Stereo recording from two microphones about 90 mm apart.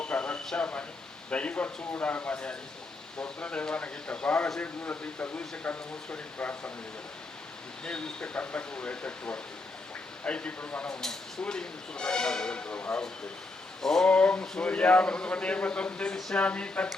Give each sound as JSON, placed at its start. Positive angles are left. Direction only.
{"t": 0.0, "sound": "a sound", "side_deg": 15}
{"t": 1.3, "sound": "speech", "side_deg": 15}
{"t": 7.9, "sound": "speech", "side_deg": 10}
{"t": 13.8, "sound": "speech", "side_deg": 5}